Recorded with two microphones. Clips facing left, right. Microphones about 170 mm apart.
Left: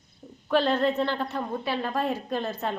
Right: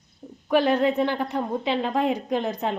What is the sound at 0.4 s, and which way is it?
A woman's voice, 15° right (ahead or behind).